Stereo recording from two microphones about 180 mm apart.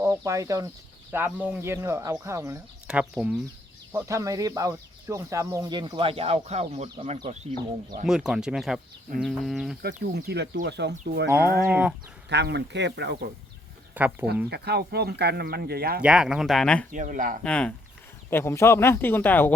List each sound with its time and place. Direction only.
0.0 s speech: 15° right (ahead or behind)
3.9 s speech: 15° right (ahead or behind); by 6.8 s 35° right (ahead or behind)
6.8 s speech: 25° right (ahead or behind)
8.0 s speech: 5° right (ahead or behind)
9.8 s speech: 60° right (ahead or behind)
11.7 s speech: 10° right (ahead or behind)
12.3 s speech: 70° right (ahead or behind)
13.9 s speech: 10° right (ahead or behind)
14.5 s speech: 65° right (ahead or behind)
16.0 s speech: 5° right (ahead or behind)
16.9 s speech: 45° right (ahead or behind)
17.4 s speech: 5° left (ahead or behind)